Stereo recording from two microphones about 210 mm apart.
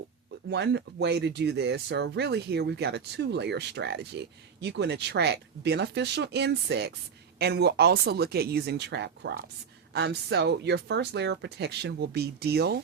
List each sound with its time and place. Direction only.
0.5 s speech: 55° right (ahead or behind)